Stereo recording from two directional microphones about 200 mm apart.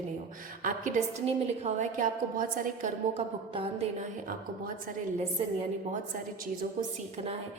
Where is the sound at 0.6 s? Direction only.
35° right (ahead or behind).